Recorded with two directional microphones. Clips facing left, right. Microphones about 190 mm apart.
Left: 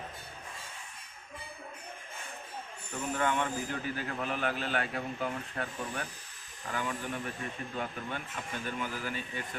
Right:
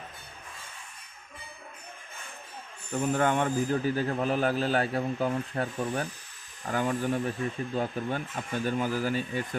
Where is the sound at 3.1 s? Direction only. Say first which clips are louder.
Right 5 dB; 45° right (ahead or behind).